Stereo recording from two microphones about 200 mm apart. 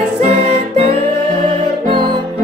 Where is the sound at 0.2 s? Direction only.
30° right (ahead or behind).